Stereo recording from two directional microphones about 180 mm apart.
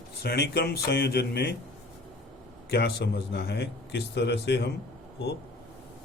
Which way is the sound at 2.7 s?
60° left (ahead or behind).